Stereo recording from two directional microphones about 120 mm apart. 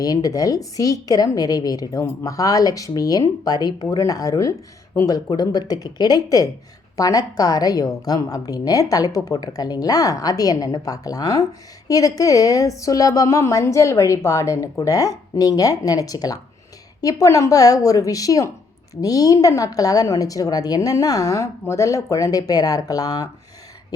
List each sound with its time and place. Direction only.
0.0 s a woman's voice: 30° left (ahead or behind)